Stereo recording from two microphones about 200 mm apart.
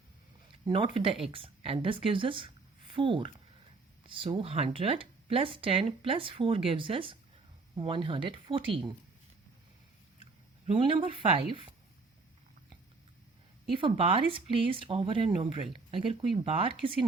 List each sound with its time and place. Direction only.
0.9 s a woman's voice: 25° right (ahead or behind)
10.7 s speech: 25° right (ahead or behind)
13.7 s speech: 25° right (ahead or behind)